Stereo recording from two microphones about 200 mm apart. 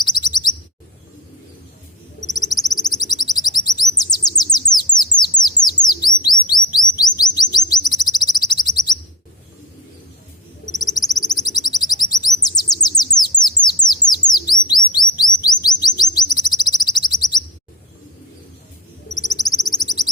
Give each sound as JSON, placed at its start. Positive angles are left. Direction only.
{"t": 0.0, "sound": "chirp", "side_deg": 20}
{"t": 2.2, "sound": "bird", "side_deg": 20}
{"t": 6.4, "sound": "chirp", "side_deg": 20}
{"t": 10.7, "sound": "bird", "side_deg": 20}
{"t": 14.9, "sound": "chirp", "side_deg": 20}
{"t": 16.0, "sound": "bird", "side_deg": 20}
{"t": 19.1, "sound": "bird", "side_deg": 20}